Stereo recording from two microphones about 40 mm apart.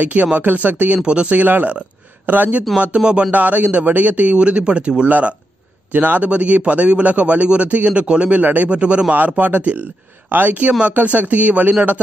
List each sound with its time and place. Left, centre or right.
0.0 s a man's voice: right
0.9 s speech: right
1.3 s speech: right
3.0 s speech: right
3.3 s a man's voice: right
5.9 s a man's voice: right
8.4 s speech: right
8.6 s a man's voice: right
9.1 s speech: right